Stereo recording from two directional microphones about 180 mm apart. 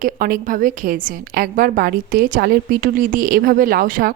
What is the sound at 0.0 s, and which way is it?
Speech, 50° right (ahead or behind).